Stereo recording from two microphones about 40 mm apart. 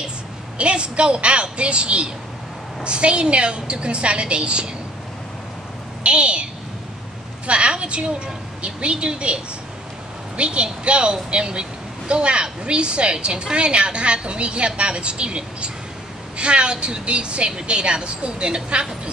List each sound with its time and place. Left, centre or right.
0.6 s a woman's voice: right
6.0 s a woman's voice: right
7.4 s a woman's voice: right